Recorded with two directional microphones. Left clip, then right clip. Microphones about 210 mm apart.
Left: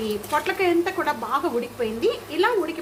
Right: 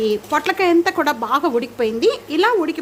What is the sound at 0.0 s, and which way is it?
A woman's voice, 55° right (ahead or behind).